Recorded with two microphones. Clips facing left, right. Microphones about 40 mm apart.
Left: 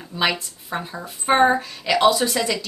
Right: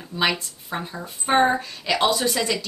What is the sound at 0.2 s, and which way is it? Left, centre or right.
A woman's voice, centre.